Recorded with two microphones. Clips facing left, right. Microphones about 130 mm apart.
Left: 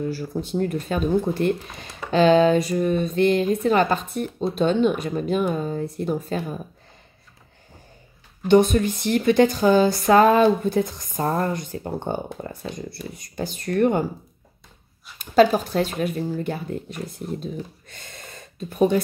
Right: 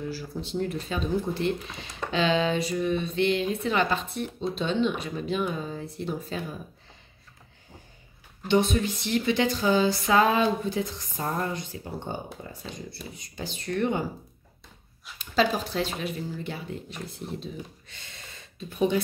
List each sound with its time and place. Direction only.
0.0 s speech: 45° left (ahead or behind)
8.5 s speech: 50° left (ahead or behind)
15.1 s speech: 50° left (ahead or behind)